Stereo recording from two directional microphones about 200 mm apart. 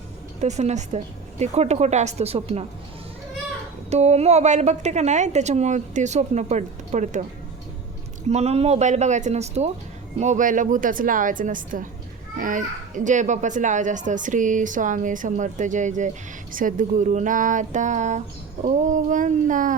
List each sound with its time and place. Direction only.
0.3 s a child's voice: 35° right (ahead or behind)
3.8 s a child's voice: 35° right (ahead or behind)
8.3 s a child's voice: 30° right (ahead or behind)